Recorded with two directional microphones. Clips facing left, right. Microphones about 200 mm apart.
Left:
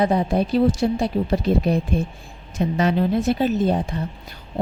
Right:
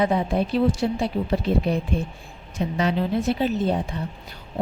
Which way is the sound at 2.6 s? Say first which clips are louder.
Left 4 dB; 55° left (ahead or behind).